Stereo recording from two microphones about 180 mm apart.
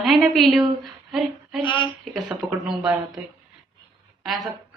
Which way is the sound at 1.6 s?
25° left (ahead or behind).